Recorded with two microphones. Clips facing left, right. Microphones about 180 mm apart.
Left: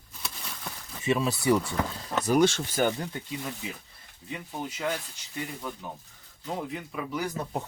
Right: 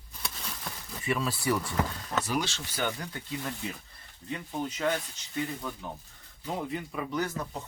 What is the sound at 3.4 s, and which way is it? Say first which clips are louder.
Speech: even; 5° left (ahead or behind).